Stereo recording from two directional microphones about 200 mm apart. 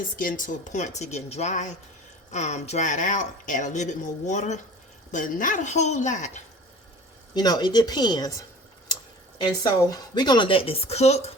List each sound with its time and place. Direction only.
0.2 s speech: 40° left (ahead or behind)
7.3 s speech: 20° left (ahead or behind)
9.4 s speech: 20° left (ahead or behind)